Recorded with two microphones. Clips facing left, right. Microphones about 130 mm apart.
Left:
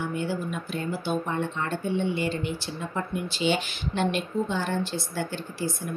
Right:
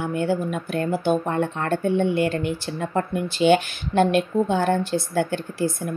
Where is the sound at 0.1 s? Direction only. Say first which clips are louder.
Right 6 dB; 55° right (ahead or behind).